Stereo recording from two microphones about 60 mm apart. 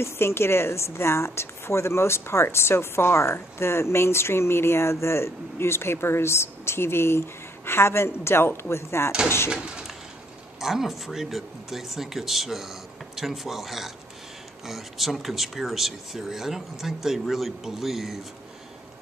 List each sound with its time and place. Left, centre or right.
0.0 s a woman's voice: left
9.5 s speech: centre